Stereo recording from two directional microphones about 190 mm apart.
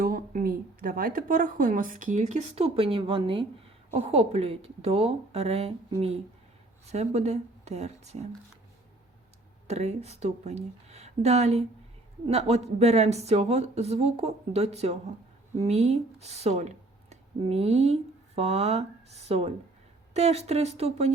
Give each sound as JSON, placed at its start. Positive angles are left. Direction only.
{"t": 0.0, "sound": "speech", "side_deg": -50}
{"t": 9.6, "sound": "speech", "side_deg": -35}